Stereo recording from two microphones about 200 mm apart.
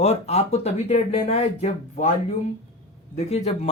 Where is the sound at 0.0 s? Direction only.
30° left (ahead or behind).